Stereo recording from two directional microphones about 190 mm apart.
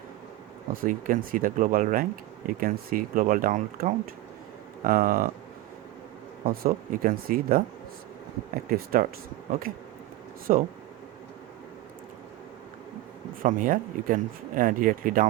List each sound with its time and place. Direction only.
0.7 s speech: 45° right (ahead or behind)
6.4 s speech: 50° right (ahead or behind)
8.7 s speech: 50° right (ahead or behind)
10.5 s speech: 45° right (ahead or behind)
13.4 s speech: 45° right (ahead or behind)